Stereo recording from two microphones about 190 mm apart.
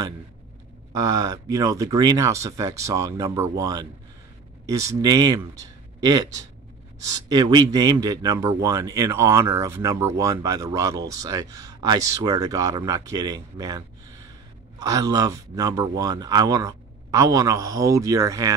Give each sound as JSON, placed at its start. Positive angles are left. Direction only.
{"t": 0.9, "sound": "a man's voice", "side_deg": -20}